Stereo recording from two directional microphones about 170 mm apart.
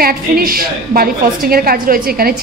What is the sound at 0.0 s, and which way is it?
A woman's voice, 60° right (ahead or behind).